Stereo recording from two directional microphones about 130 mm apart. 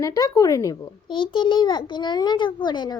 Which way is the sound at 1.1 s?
40° left (ahead or behind).